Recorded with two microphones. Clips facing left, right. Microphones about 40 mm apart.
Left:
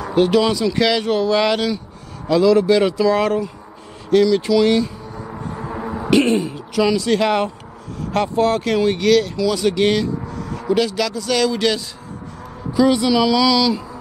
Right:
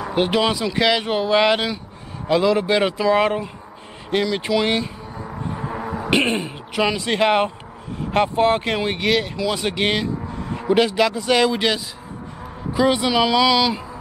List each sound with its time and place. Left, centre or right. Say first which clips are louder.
0.0 s speech: left 4 dB; right
5.4 s a sound: even; centre
6.0 s speech: left 4 dB; right